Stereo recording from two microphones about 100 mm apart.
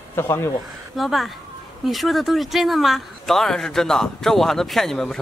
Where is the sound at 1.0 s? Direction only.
Centre (ahead or behind).